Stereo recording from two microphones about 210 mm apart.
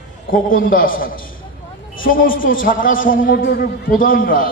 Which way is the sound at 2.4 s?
65° left (ahead or behind).